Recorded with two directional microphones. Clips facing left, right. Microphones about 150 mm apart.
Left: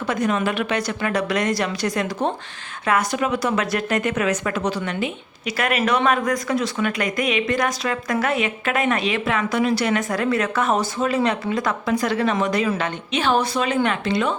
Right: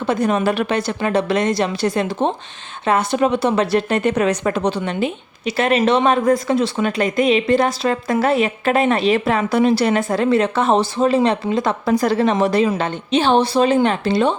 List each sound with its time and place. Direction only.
0.1 s a woman's voice: 35° right (ahead or behind)